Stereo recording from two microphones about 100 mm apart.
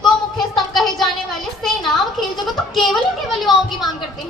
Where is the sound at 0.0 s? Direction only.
Centre (ahead or behind).